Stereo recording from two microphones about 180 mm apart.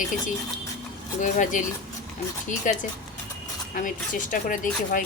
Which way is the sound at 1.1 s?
45° left (ahead or behind).